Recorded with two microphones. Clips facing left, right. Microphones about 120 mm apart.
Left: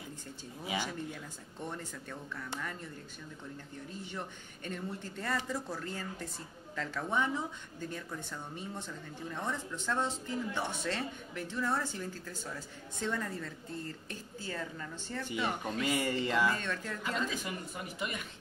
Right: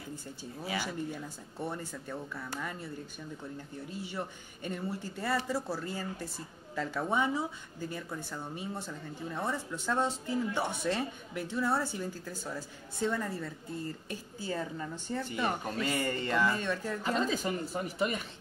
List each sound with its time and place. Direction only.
0.8 s speech: 10° right (ahead or behind)
4.6 s speech: 10° right (ahead or behind)
15.8 s speech: 10° left (ahead or behind)
16.5 s speech: 10° right (ahead or behind)
17.0 s speech: 35° right (ahead or behind)